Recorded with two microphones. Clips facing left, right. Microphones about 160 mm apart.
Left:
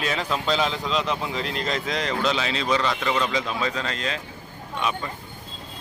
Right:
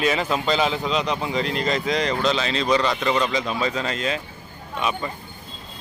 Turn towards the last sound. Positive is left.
turn(degrees=-5)  # may be behind; listen again after turning